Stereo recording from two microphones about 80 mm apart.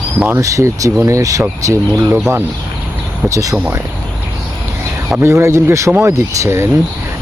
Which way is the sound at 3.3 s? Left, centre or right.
Right.